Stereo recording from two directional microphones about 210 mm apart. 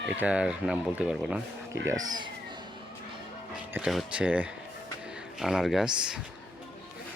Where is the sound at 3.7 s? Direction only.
5° right (ahead or behind).